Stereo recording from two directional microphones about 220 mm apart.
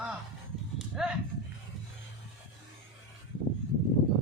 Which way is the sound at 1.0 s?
Centre (ahead or behind).